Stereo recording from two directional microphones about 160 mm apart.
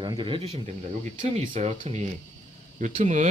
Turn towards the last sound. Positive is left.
turn(degrees=-50)  # may be behind; listen again after turning